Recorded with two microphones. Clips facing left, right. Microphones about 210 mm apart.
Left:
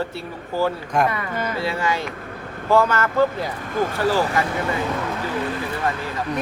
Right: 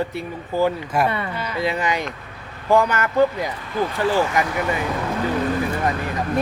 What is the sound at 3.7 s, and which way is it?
Speech, 45° left (ahead or behind).